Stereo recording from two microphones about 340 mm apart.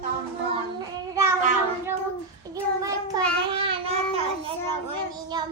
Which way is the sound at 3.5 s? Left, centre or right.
Centre.